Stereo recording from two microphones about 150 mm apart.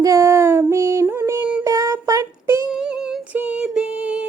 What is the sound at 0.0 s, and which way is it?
Female singing, 20° right (ahead or behind).